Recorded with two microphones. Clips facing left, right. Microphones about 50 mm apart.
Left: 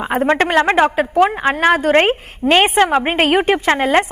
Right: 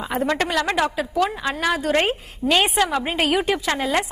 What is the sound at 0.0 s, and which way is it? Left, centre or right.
A woman's voice, left.